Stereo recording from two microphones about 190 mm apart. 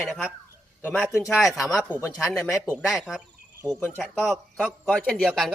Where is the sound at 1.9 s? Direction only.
15° left (ahead or behind).